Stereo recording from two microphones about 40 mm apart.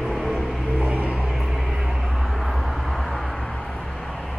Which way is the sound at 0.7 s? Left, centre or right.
Right.